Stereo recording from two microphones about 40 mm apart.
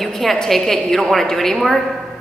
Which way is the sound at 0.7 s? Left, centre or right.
Centre.